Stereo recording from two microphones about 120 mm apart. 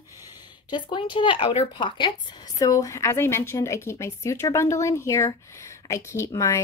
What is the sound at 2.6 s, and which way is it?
Speech, 30° left (ahead or behind).